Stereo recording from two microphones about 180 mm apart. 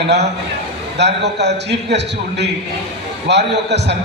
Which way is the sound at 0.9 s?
70° right (ahead or behind).